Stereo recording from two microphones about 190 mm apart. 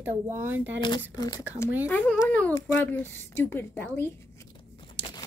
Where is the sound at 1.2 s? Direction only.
20° left (ahead or behind).